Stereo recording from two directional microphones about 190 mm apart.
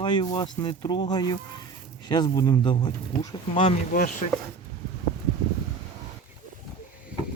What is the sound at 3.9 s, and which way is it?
Speech, 45° left (ahead or behind).